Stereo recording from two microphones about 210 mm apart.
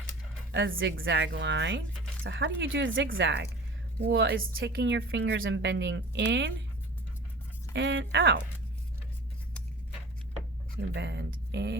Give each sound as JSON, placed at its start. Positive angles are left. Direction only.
{"t": 0.5, "sound": "speech", "side_deg": -60}
{"t": 7.7, "sound": "speech", "side_deg": -55}
{"t": 10.8, "sound": "speech", "side_deg": -55}